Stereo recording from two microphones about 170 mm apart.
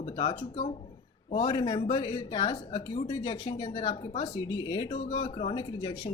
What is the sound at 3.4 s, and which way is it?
Speech, 20° left (ahead or behind).